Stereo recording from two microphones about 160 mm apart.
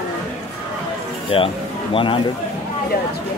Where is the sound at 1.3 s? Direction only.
35° left (ahead or behind).